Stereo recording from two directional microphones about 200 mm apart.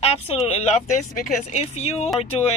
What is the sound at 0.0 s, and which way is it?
Speech, 30° left (ahead or behind).